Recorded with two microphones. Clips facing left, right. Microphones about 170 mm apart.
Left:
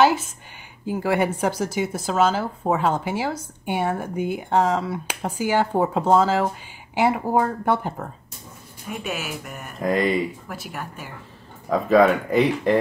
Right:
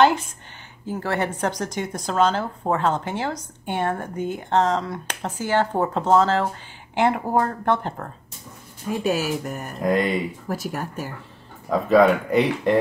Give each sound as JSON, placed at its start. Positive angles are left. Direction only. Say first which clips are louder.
{"t": 0.0, "sound": "speech", "louder": "even", "side_deg": 5}
{"t": 8.8, "sound": "speech", "louder": "right 7 dB", "side_deg": -30}
{"t": 9.8, "sound": "speech", "louder": "even", "side_deg": 0}
{"t": 10.5, "sound": "speech", "louder": "right 6 dB", "side_deg": -40}
{"t": 11.7, "sound": "speech", "louder": "even", "side_deg": 0}